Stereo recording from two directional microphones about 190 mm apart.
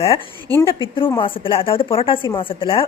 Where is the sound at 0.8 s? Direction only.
25° left (ahead or behind).